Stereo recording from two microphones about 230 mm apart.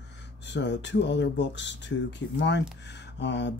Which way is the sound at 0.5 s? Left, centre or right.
Left.